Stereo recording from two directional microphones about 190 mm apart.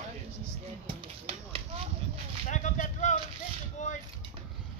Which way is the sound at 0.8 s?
30° right (ahead or behind).